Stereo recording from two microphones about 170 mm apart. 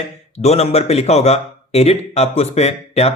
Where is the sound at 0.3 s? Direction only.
40° left (ahead or behind).